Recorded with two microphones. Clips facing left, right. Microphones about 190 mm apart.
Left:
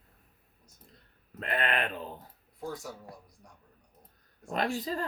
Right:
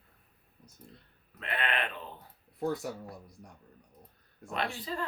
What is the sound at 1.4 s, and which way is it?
Speech, 40° left (ahead or behind).